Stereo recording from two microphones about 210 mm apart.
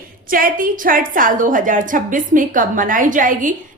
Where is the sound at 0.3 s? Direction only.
40° right (ahead or behind).